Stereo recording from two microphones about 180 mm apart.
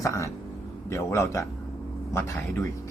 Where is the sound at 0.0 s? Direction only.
15° left (ahead or behind).